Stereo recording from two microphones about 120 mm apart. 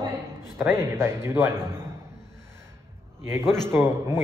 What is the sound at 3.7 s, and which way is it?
Speech, 20° right (ahead or behind).